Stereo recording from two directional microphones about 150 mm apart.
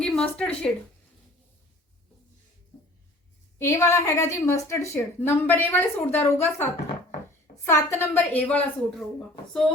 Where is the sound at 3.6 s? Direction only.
20° left (ahead or behind).